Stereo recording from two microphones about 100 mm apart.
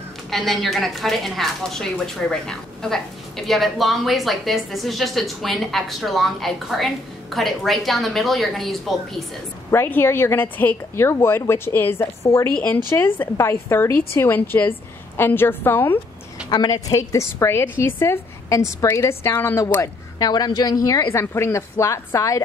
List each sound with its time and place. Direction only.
0.3 s a woman's voice: centre (ahead or behind)
9.7 s a woman's voice: 20° left (ahead or behind)
16.4 s a woman's voice: 45° left (ahead or behind)